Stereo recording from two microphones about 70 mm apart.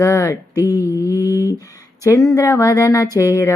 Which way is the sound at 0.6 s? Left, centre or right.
Right.